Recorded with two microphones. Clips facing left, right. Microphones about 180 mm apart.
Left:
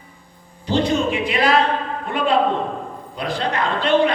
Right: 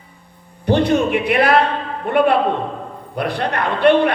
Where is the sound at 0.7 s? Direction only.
60° right (ahead or behind).